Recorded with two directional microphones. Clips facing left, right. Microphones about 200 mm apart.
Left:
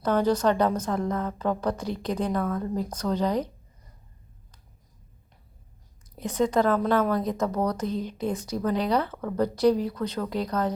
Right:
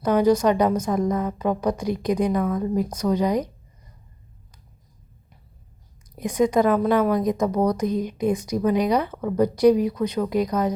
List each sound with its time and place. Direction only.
0.0 s a woman's voice: 10° right (ahead or behind)
6.1 s a woman's voice: 15° right (ahead or behind)